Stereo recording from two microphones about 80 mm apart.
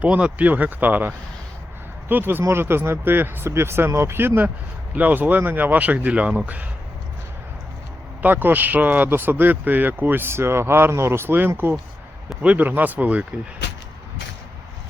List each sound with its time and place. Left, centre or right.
0.0 s speech: centre
8.2 s speech: right